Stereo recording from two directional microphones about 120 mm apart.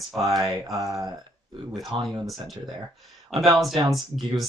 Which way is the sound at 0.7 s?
30° right (ahead or behind).